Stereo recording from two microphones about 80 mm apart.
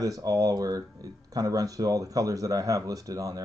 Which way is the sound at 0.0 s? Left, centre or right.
Right.